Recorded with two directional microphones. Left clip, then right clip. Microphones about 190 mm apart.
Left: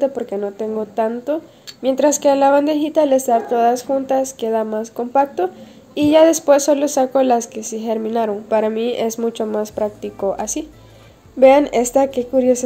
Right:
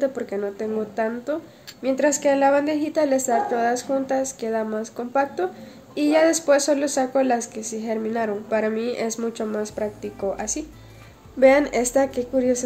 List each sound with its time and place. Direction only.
0.0 s speech: 30° left (ahead or behind)
2.0 s a woman's voice: 5° left (ahead or behind)
2.9 s a woman's voice: 35° left (ahead or behind)